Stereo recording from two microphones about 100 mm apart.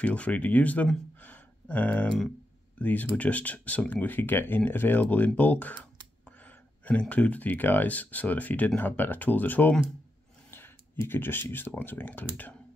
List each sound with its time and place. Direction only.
0.0 s speech: 15° left (ahead or behind)
1.2 s a sound: 15° left (ahead or behind)
2.8 s speech: 15° left (ahead or behind)